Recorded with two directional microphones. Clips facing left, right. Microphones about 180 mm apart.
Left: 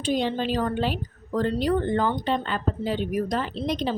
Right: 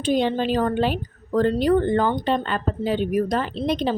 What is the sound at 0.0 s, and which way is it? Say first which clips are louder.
Speech: right 4 dB; 55° right (ahead or behind).